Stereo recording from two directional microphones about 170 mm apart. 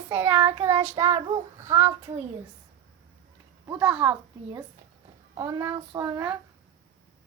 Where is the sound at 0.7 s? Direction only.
40° right (ahead or behind).